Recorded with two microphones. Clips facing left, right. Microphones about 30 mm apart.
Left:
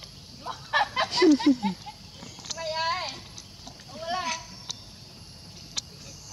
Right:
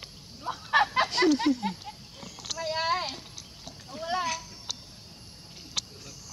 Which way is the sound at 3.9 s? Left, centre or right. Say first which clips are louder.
Even; centre.